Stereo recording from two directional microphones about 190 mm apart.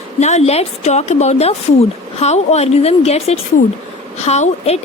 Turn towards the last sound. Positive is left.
turn(degrees=35)  # may be behind; listen again after turning